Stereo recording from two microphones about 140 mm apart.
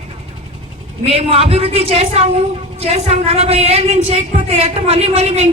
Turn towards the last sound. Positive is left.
turn(degrees=-50)  # may be behind; listen again after turning